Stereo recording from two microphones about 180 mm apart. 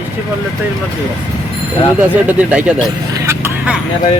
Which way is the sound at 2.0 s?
5° right (ahead or behind).